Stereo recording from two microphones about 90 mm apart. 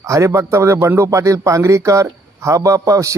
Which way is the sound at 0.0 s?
35° right (ahead or behind).